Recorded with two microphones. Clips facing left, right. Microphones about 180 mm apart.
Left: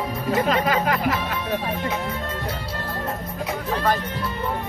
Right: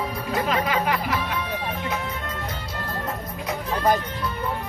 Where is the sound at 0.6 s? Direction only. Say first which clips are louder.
Left 3 dB; 45° left (ahead or behind).